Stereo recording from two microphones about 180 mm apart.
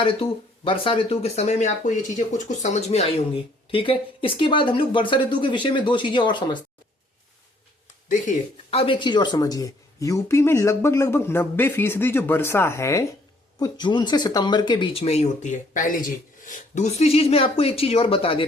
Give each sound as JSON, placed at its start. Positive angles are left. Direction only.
{"t": 0.0, "sound": "speech", "side_deg": 30}
{"t": 8.0, "sound": "speech", "side_deg": 45}
{"t": 8.7, "sound": "speech", "side_deg": 30}